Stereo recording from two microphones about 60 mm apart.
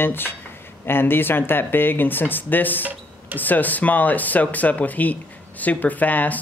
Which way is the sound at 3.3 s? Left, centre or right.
Left.